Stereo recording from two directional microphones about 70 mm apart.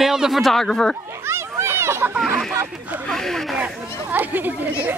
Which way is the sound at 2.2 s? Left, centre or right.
Centre.